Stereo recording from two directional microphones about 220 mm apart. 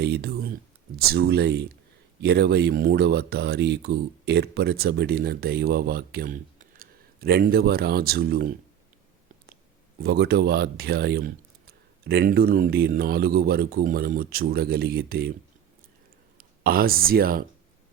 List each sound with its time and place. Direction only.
0.0 s speech: 45° right (ahead or behind)
10.0 s speech: 45° right (ahead or behind)
16.4 s speech: 40° right (ahead or behind)